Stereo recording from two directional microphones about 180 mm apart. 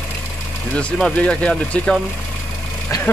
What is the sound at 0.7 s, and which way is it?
Speech, 5° left (ahead or behind).